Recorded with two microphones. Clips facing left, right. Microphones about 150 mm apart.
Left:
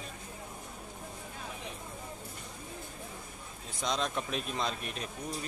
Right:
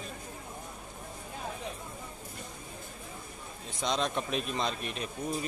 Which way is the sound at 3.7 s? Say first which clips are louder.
Right 2 dB; centre (ahead or behind).